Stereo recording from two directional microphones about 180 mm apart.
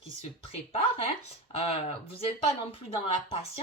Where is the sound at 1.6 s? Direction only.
35° left (ahead or behind).